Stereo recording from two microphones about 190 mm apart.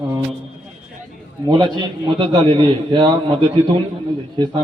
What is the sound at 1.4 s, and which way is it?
A man's voice, 20° right (ahead or behind).